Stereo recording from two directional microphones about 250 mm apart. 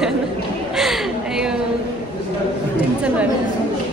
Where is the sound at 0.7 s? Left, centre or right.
Centre.